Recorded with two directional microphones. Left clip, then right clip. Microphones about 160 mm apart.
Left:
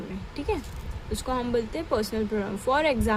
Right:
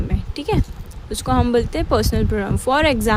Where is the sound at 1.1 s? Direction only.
45° right (ahead or behind).